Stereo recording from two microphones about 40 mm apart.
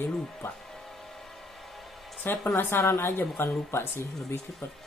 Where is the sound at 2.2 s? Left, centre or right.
Left.